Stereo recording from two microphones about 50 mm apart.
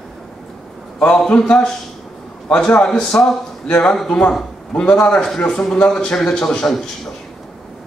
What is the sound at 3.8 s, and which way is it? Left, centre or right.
A man's voice, centre.